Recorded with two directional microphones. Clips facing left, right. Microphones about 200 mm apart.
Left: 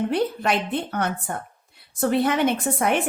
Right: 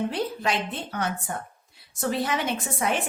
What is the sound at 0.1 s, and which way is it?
A woman's voice, 60° left (ahead or behind).